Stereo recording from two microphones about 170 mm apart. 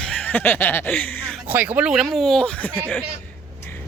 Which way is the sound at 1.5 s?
10° right (ahead or behind).